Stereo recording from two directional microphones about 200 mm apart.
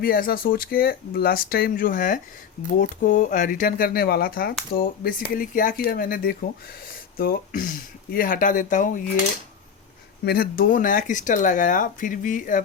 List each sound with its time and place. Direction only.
0.0 s speech: 45° left (ahead or behind)
10.2 s speech: 50° left (ahead or behind)